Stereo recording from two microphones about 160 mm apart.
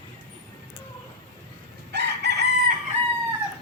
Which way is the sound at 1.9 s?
90° right.